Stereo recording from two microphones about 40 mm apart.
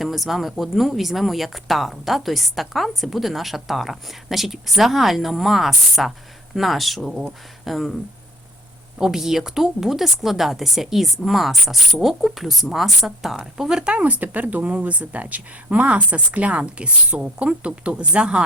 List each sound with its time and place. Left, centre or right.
0.0 s speech: centre
9.0 s a woman's voice: centre
13.9 s speech: right